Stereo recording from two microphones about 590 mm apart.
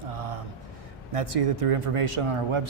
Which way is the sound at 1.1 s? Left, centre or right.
Right.